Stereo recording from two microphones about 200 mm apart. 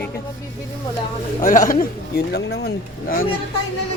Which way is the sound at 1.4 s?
40° left (ahead or behind).